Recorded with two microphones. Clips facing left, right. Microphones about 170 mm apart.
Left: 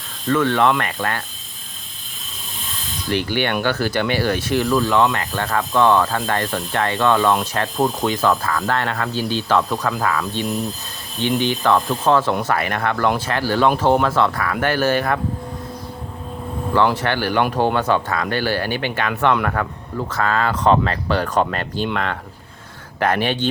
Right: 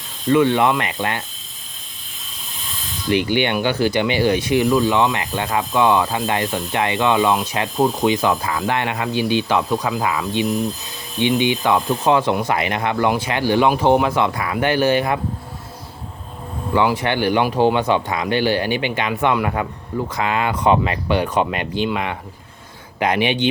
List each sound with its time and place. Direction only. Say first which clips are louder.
0.3 s speech: right 2 dB; 15° right (ahead or behind)
3.1 s speech: right 3 dB; 15° right (ahead or behind)
16.7 s speech: even; 10° right (ahead or behind)